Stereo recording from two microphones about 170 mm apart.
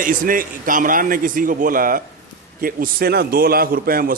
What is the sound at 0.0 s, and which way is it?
A man's voice, 55° right (ahead or behind).